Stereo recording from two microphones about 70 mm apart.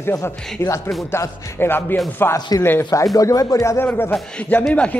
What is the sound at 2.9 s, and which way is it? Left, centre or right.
Music, left.